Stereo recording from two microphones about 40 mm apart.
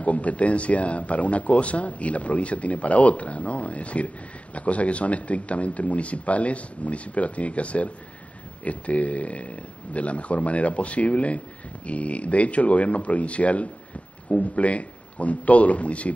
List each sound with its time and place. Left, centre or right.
0.0 s speech: left